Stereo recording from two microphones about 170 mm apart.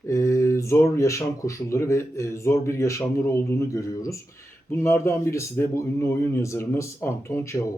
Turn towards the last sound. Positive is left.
turn(degrees=15)  # may be behind; listen again after turning